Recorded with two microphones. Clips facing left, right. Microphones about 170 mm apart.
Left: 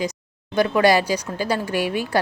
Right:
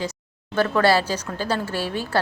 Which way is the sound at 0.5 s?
15° left (ahead or behind).